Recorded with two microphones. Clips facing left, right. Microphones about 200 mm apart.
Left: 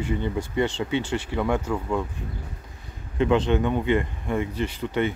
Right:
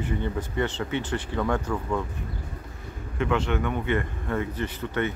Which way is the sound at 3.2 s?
20° left (ahead or behind).